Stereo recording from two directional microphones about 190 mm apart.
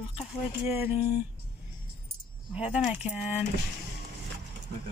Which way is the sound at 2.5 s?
5° right (ahead or behind).